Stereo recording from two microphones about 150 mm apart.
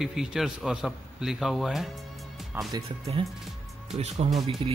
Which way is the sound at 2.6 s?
15° right (ahead or behind).